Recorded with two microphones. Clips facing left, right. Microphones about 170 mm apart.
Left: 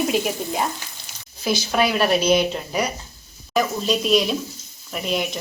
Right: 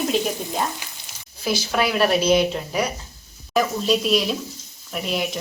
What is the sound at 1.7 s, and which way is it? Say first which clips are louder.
Speech: even; centre (ahead or behind).